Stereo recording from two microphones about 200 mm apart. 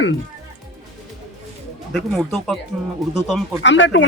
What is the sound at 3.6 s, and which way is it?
Speech, 65° left (ahead or behind).